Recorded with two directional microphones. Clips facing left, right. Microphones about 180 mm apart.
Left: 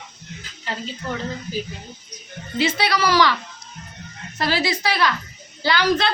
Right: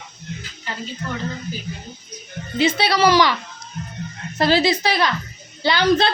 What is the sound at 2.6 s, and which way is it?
Speech, 20° right (ahead or behind).